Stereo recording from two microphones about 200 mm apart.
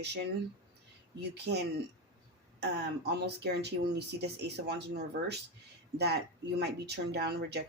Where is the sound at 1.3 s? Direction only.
55° right (ahead or behind).